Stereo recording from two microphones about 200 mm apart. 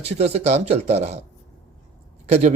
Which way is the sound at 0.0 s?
30° right (ahead or behind).